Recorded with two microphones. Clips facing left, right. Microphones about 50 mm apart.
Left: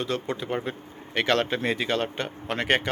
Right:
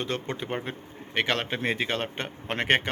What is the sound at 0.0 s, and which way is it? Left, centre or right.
Speech, right.